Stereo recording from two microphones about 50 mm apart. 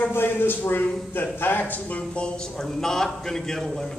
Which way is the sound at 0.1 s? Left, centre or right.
Left.